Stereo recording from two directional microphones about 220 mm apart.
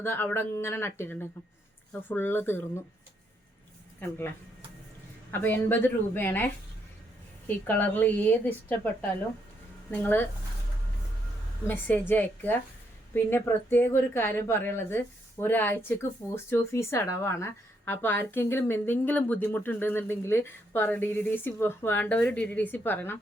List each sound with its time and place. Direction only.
0.0 s a woman's voice: 10° left (ahead or behind)
4.0 s a woman's voice: 10° left (ahead or behind)
5.3 s a woman's voice: 10° left (ahead or behind)
11.7 s a woman's voice: 10° left (ahead or behind)